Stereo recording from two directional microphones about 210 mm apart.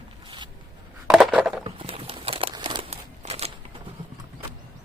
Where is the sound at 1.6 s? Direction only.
25° right (ahead or behind).